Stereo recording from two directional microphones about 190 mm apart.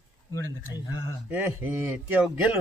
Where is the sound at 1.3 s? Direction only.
10° right (ahead or behind).